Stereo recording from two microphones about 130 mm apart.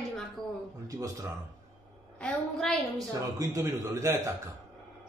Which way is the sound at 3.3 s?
25° right (ahead or behind).